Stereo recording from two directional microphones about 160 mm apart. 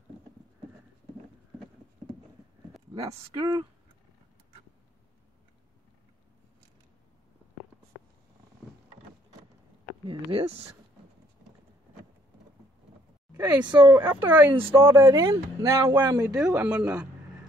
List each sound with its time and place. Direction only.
2.9 s speech: 25° right (ahead or behind)
10.0 s speech: 35° right (ahead or behind)
13.3 s a sound: 10° right (ahead or behind)
13.7 s speech: 30° right (ahead or behind)
13.9 s speech: 10° right (ahead or behind)
16.3 s speech: 5° right (ahead or behind)